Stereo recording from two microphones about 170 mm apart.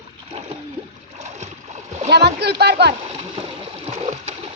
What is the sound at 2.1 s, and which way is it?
Speech, 75° right (ahead or behind).